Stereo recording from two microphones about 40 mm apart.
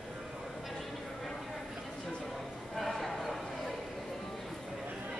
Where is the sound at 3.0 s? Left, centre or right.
Centre.